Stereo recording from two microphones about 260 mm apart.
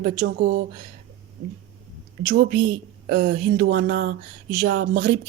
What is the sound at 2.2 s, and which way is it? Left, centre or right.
Speech, right.